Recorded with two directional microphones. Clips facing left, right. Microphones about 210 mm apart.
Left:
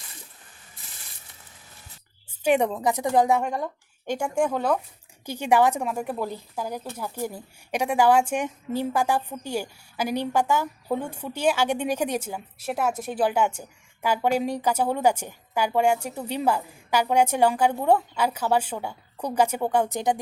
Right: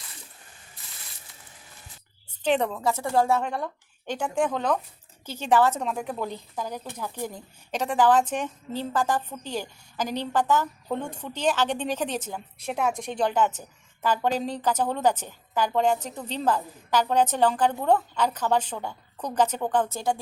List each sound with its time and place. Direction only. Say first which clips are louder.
2.4 s a woman's voice: left 3 dB; 10° left (ahead or behind)